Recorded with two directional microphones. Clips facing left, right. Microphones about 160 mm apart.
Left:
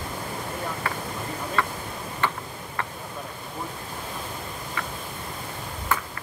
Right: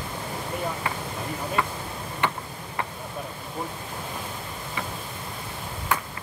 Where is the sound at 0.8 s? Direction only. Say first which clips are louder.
Even; 15° right (ahead or behind).